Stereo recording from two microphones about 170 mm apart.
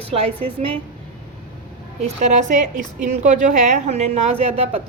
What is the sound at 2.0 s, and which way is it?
A woman's voice, 45° right (ahead or behind).